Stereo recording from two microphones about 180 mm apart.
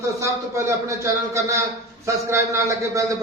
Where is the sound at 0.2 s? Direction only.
15° right (ahead or behind).